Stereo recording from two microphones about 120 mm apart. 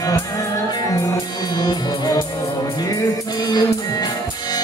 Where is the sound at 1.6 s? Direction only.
30° left (ahead or behind).